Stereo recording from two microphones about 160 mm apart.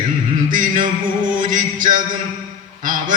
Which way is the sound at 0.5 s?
55° right (ahead or behind).